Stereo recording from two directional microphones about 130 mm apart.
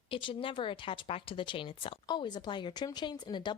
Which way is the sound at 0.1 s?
40° left (ahead or behind).